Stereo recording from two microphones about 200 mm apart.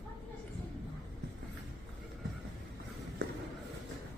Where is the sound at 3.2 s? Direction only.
60° right (ahead or behind).